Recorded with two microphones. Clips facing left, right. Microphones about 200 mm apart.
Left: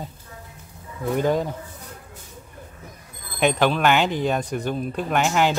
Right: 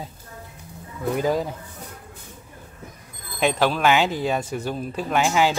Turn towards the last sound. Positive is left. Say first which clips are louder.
# even
turn(degrees=-5)  # may be behind; listen again after turning